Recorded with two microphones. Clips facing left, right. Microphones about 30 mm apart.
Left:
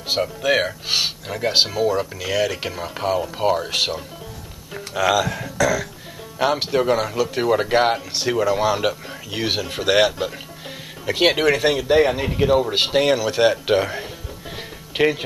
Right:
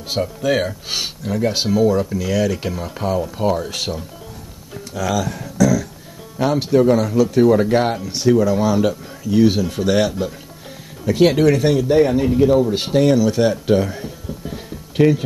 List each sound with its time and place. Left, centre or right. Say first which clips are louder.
0.1 s speech: even; left